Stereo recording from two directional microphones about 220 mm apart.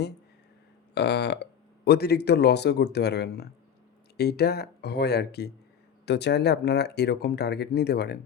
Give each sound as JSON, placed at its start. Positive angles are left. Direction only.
{"t": 0.9, "sound": "speech", "side_deg": 50}